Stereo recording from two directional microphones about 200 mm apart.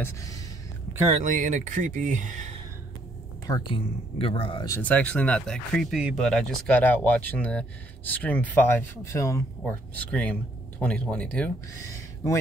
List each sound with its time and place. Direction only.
0.0 s speech: 15° left (ahead or behind)
1.1 s speech: 40° right (ahead or behind)
3.4 s speech: 20° left (ahead or behind)
4.6 s speech: 10° left (ahead or behind)